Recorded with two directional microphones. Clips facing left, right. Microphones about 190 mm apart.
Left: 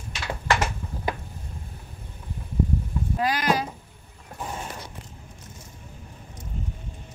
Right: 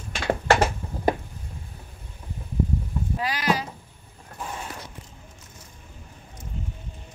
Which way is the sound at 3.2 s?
45° left (ahead or behind).